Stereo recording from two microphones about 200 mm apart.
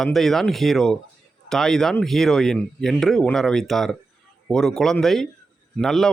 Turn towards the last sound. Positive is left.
turn(degrees=0)  # may be behind; listen again after turning